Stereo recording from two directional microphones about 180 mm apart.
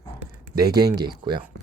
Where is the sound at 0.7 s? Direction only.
20° right (ahead or behind).